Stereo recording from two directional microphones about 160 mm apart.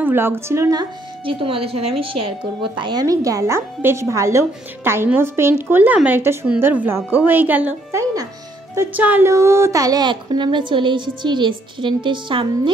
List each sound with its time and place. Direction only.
0.0 s a woman's voice: 15° right (ahead or behind); by 2.0 s 35° right (ahead or behind)
2.8 s a woman's voice: 25° right (ahead or behind)
8.7 s a woman's voice: 10° right (ahead or behind); by 12.7 s 30° right (ahead or behind)